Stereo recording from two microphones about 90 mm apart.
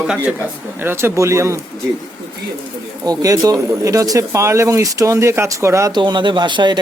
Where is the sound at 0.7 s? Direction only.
25° right (ahead or behind).